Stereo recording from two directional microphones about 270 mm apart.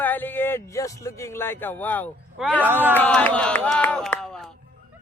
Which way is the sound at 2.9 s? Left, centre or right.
Centre.